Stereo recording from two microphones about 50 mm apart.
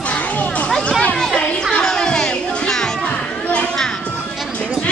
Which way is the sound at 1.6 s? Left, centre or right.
Centre.